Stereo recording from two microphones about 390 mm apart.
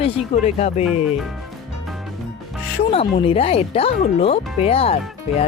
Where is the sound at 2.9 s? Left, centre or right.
Centre.